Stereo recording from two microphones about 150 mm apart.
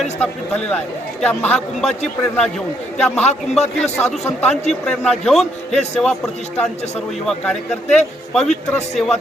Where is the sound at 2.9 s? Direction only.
10° left (ahead or behind).